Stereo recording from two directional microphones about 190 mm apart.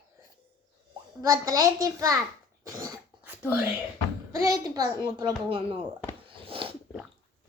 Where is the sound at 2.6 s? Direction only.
20° right (ahead or behind).